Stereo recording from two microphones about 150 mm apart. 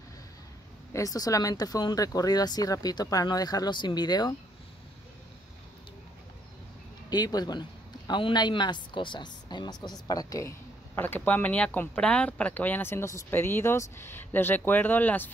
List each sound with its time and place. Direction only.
0.9 s speech: 25° left (ahead or behind)
7.1 s a woman's voice: 25° left (ahead or behind)
11.0 s speech: 15° left (ahead or behind)